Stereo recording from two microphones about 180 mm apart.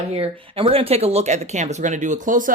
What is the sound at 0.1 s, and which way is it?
Speech, 30° right (ahead or behind).